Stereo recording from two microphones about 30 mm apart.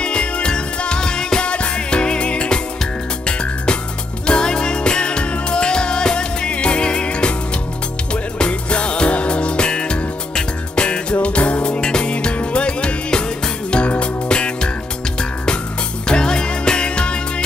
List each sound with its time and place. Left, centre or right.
0.0 s music: left
11.2 s music: left
11.8 s music: left
14.3 s music: left
16.1 s music: left